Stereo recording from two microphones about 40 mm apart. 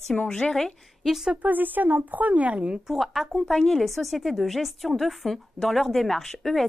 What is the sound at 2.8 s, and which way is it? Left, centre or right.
Speech, centre.